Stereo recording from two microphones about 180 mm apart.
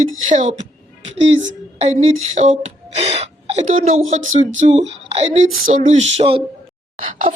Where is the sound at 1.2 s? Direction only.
40° right (ahead or behind).